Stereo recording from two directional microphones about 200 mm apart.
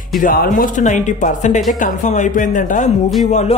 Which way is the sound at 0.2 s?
45° left (ahead or behind).